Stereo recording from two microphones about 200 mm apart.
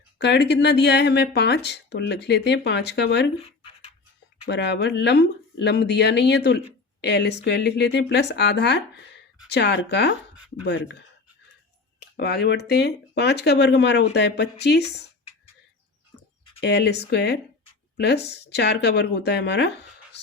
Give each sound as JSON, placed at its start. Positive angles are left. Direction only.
{"t": 0.2, "sound": "speech", "side_deg": 55}
{"t": 3.4, "sound": "a sound", "side_deg": 30}
{"t": 4.4, "sound": "speech", "side_deg": 60}
{"t": 11.9, "sound": "speech", "side_deg": 50}
{"t": 16.6, "sound": "speech", "side_deg": 55}